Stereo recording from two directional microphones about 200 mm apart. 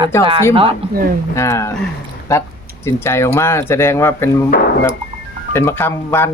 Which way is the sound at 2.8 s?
15° left (ahead or behind).